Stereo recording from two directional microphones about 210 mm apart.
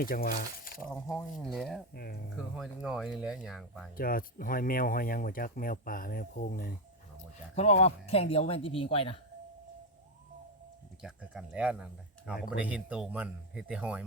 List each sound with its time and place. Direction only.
0.0 s speech: 45° left (ahead or behind)
1.1 s speech: 5° left (ahead or behind)
1.9 s speech: 45° left (ahead or behind)
2.3 s speech: centre (ahead or behind)
3.9 s speech: 45° left (ahead or behind)
7.5 s speech: 30° left (ahead or behind)
11.0 s speech: 5° right (ahead or behind)